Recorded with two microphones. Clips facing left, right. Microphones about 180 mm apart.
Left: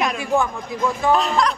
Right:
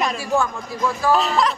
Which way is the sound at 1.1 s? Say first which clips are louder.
Even; centre (ahead or behind).